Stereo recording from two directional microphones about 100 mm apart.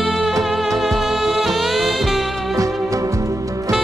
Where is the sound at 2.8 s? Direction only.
35° right (ahead or behind).